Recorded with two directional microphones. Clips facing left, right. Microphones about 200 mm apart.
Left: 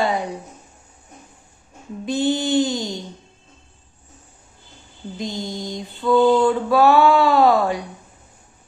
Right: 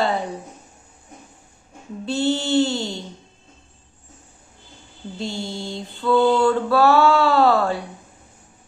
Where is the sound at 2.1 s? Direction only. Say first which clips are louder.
Left 1 dB; 15° left (ahead or behind).